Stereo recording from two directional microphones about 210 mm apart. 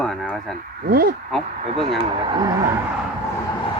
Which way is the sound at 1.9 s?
25° right (ahead or behind).